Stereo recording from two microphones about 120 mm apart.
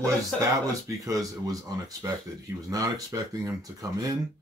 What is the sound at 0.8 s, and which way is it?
Speech, 30° right (ahead or behind).